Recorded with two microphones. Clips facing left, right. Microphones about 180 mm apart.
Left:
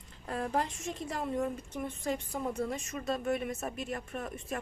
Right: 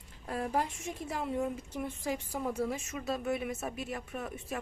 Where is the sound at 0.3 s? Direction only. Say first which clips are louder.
Even; 5° right (ahead or behind).